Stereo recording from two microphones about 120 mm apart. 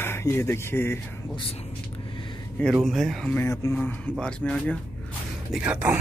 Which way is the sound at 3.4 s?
30° left (ahead or behind).